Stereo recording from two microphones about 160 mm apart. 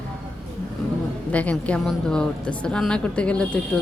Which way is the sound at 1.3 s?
10° left (ahead or behind).